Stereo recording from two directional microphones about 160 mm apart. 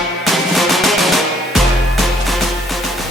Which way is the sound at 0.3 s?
Centre (ahead or behind).